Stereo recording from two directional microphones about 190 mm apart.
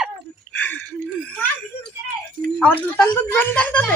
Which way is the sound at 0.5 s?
10° left (ahead or behind).